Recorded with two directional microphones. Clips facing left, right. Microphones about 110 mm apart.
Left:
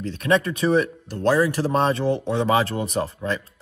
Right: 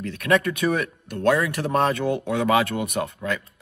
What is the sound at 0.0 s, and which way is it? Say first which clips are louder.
Speech: even; 25° left (ahead or behind).